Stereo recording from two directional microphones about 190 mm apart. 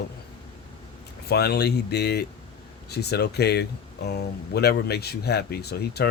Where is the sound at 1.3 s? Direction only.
60° left (ahead or behind).